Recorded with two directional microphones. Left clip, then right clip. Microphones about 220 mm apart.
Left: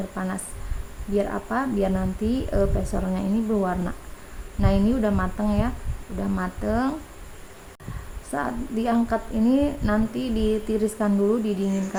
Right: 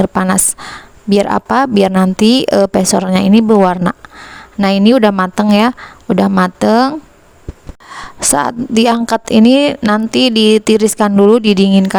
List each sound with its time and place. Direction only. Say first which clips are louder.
0.1 s speech: right 17 dB; 55° right (ahead or behind)
8.3 s speech: right 14 dB; 50° right (ahead or behind)